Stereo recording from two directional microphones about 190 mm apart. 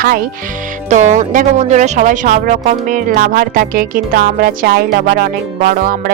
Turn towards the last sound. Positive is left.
turn(degrees=-50)  # may be behind; listen again after turning